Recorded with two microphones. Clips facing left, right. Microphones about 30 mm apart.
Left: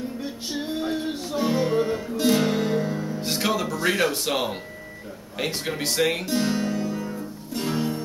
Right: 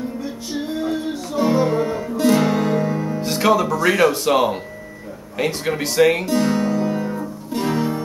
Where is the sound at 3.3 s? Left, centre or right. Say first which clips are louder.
Right 9 dB; centre.